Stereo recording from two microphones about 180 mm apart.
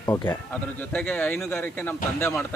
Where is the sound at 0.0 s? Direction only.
15° left (ahead or behind).